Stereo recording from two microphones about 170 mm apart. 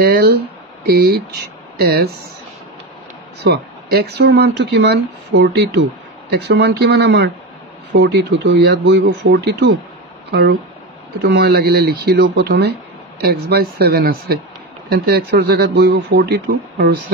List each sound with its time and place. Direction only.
0.0 s speech: 70° right (ahead or behind)
3.4 s speech: 70° right (ahead or behind)
11.2 s speech: 70° right (ahead or behind)